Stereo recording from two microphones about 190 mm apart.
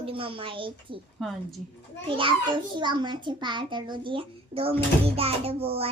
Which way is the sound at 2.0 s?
25° right (ahead or behind).